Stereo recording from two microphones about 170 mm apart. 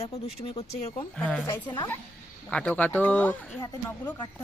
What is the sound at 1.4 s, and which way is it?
Speech, 25° left (ahead or behind).